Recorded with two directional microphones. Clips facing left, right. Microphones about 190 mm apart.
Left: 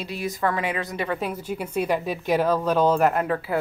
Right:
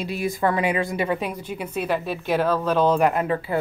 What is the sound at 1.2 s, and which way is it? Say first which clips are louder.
A woman's voice: left 1 dB; 5° left (ahead or behind).